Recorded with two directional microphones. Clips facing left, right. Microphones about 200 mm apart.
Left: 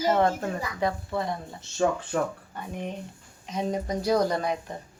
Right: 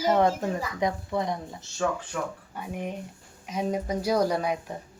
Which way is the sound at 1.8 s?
30° left (ahead or behind).